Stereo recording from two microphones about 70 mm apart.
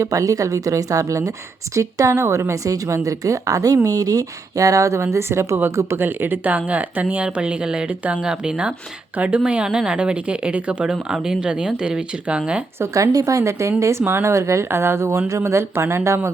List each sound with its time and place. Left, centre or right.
0.0 s a woman's voice: right; by 12.4 s centre
12.8 s a woman's voice: right